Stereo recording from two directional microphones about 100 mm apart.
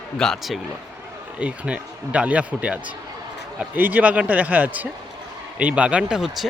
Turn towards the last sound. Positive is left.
turn(degrees=-5)  # may be behind; listen again after turning